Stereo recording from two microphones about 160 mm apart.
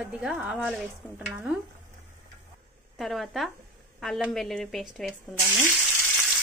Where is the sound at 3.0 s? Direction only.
Centre (ahead or behind).